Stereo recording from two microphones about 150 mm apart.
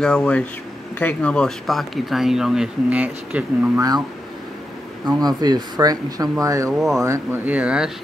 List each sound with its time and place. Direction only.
0.0 s speech: 10° left (ahead or behind); by 3.8 s 10° right (ahead or behind)
5.0 s speech: 25° right (ahead or behind); by 7.9 s 5° right (ahead or behind)